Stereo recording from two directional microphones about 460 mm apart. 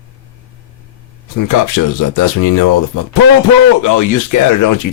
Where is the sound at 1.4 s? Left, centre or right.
Left.